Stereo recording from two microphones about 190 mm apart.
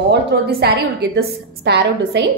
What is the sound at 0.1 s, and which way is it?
A woman's voice, 55° right (ahead or behind).